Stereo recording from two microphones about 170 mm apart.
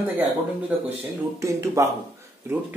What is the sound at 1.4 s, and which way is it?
Speech, 15° right (ahead or behind).